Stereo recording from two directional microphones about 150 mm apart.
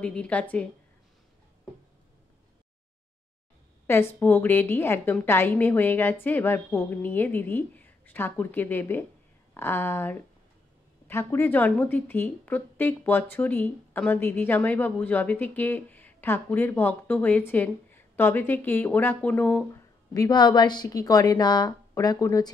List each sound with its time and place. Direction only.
0.0 s a woman's voice: 5° left (ahead or behind)
3.8 s a woman's voice: 15° left (ahead or behind)
19.7 s speech: 25° left (ahead or behind)